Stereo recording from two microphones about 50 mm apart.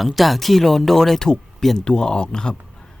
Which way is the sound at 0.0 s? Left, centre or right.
Centre.